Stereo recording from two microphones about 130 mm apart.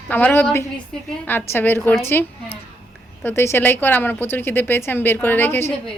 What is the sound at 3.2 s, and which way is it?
Speech, 20° left (ahead or behind).